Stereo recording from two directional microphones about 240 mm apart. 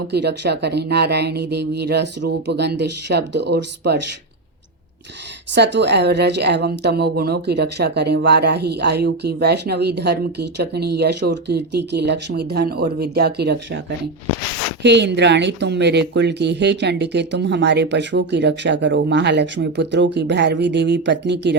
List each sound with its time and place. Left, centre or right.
0.1 s a woman's voice: right
5.5 s a woman's voice: right